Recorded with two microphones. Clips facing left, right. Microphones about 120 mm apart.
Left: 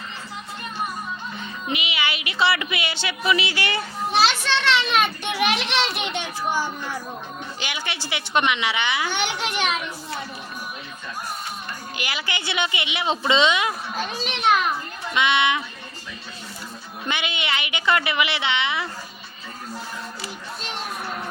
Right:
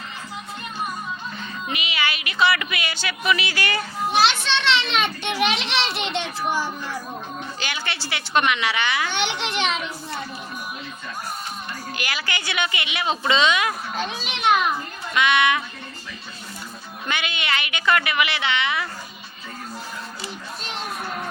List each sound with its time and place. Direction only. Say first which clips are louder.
1.4 s a woman's voice: left 1 dB; 20° left (ahead or behind)
4.4 s a child's voice: left 1 dB; 10° left (ahead or behind)
7.6 s a child's voice: left 1 dB; 15° left (ahead or behind)
11.9 s a woman's voice: even; 20° left (ahead or behind)
13.9 s a child's voice: even; centre (ahead or behind)
15.1 s a woman's voice: right 1 dB; 20° left (ahead or behind)
17.1 s a woman's voice: even; 20° left (ahead or behind)